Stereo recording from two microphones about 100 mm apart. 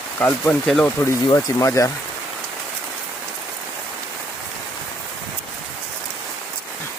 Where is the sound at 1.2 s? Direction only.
35° left (ahead or behind).